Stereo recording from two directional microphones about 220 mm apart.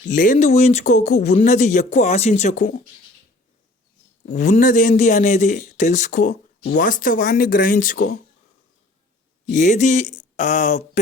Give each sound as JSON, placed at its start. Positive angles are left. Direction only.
{"t": 0.0, "sound": "speech", "side_deg": 35}
{"t": 4.4, "sound": "speech", "side_deg": 35}
{"t": 9.5, "sound": "speech", "side_deg": 35}